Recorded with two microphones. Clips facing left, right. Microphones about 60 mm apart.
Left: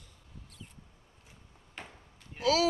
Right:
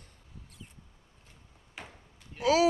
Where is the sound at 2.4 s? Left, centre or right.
Right.